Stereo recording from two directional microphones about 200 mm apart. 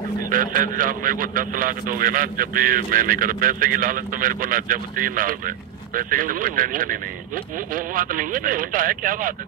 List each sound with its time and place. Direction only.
0.3 s a man's voice: 45° right (ahead or behind)